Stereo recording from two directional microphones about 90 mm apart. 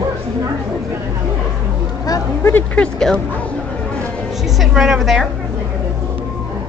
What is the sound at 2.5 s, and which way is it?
Speech, 20° left (ahead or behind).